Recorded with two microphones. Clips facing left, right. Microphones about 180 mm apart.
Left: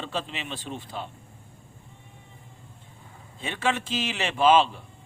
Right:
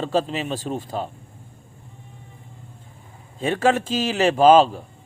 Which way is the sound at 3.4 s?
40° right (ahead or behind).